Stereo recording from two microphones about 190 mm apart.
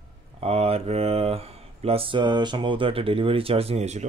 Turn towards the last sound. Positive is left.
turn(degrees=-35)  # may be behind; listen again after turning